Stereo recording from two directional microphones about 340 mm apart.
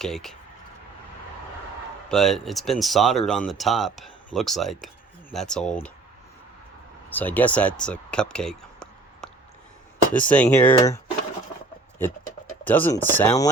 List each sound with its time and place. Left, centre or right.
0.0 s speech: centre
2.0 s speech: centre
7.1 s speech: centre
12.6 s speech: centre